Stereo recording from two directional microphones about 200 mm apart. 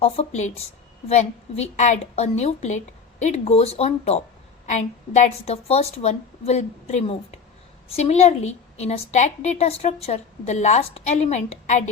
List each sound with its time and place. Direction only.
0.0 s a woman's voice: 35° left (ahead or behind)